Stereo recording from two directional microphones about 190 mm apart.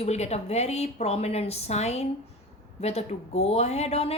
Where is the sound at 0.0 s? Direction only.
35° left (ahead or behind).